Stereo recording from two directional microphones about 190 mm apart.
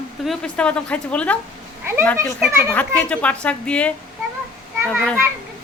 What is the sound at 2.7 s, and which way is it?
A woman's voice, 5° left (ahead or behind).